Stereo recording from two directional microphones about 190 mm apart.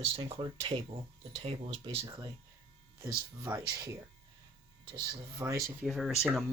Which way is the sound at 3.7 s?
15° right (ahead or behind).